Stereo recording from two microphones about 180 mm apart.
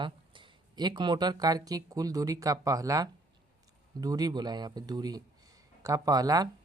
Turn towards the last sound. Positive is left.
turn(degrees=-20)  # may be behind; listen again after turning